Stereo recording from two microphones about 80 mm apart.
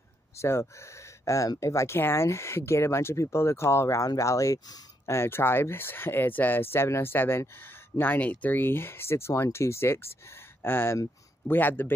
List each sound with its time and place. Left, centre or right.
0.4 s speech: left
5.0 s speech: left